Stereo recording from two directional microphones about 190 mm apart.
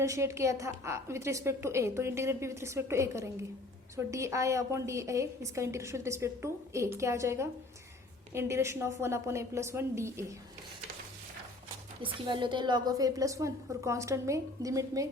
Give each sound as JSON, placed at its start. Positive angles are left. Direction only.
{"t": 0.0, "sound": "a woman's voice", "side_deg": -15}
{"t": 12.0, "sound": "a woman's voice", "side_deg": -25}